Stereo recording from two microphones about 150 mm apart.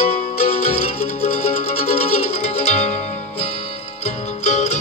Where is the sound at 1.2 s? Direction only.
50° left (ahead or behind).